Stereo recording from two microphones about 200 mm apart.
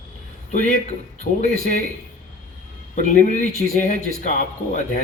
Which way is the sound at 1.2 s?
40° left (ahead or behind).